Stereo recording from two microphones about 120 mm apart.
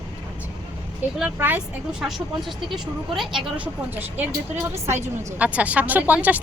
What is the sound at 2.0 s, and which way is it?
A woman's voice, centre (ahead or behind).